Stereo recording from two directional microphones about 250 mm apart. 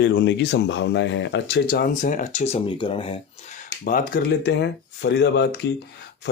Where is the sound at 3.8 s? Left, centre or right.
Left.